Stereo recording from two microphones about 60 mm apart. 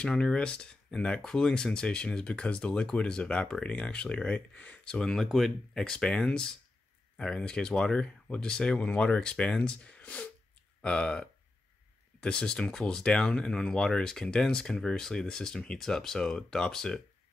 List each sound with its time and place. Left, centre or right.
0.0 s speech: centre